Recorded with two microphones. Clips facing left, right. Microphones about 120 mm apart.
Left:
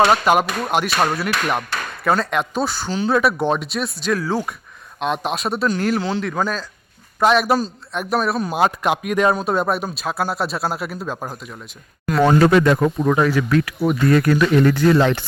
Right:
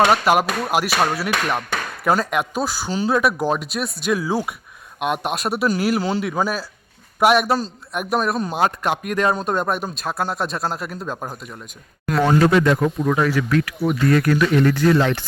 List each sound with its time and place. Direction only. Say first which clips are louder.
0.0 s a man's voice: left 1 dB; 5° right (ahead or behind)
7.4 s a man's voice: left 2 dB; 10° left (ahead or behind)
7.9 s speech: left 1 dB; centre (ahead or behind)
12.2 s speech: left 2 dB; 55° left (ahead or behind)
13.1 s speech: left 2 dB; 25° left (ahead or behind)